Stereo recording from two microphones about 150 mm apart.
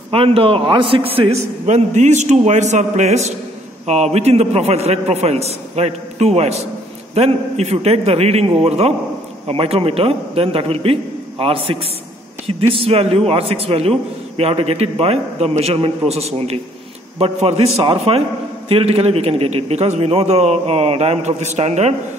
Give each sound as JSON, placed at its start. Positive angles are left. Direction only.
{"t": 0.1, "sound": "a man's voice", "side_deg": -40}
{"t": 1.7, "sound": "a man's voice", "side_deg": -50}